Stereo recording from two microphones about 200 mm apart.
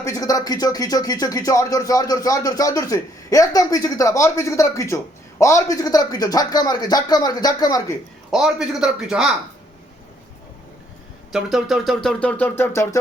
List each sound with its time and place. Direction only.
0.0 s a man's voice: 15° left (ahead or behind)
8.3 s a man's voice: 5° right (ahead or behind)
11.3 s a man's voice: centre (ahead or behind)